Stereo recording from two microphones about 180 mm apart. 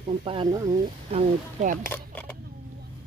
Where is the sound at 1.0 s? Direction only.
40° right (ahead or behind).